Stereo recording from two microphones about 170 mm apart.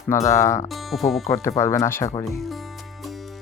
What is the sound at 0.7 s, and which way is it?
Speech, centre (ahead or behind).